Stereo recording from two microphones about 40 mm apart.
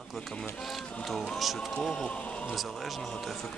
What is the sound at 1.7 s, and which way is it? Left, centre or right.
Speech, left.